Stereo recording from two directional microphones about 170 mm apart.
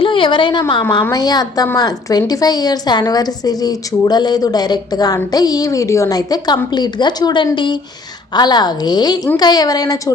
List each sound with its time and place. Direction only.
0.0 s a woman's voice: 30° left (ahead or behind)